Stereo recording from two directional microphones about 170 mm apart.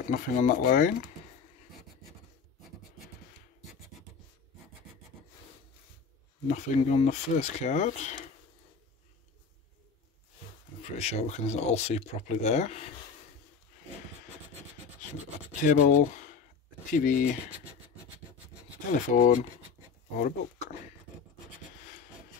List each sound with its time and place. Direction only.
0.1 s speech: 50° left (ahead or behind)
6.4 s speech: 40° left (ahead or behind)
10.8 s speech: 40° left (ahead or behind)
15.6 s speech: 50° left (ahead or behind)
18.9 s speech: 50° left (ahead or behind)